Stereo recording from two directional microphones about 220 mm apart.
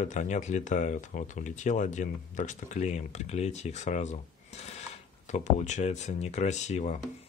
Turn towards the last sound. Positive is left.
turn(degrees=30)  # may be behind; listen again after turning